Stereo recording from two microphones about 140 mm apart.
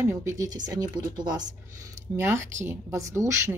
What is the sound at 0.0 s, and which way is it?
Speech, 15° right (ahead or behind).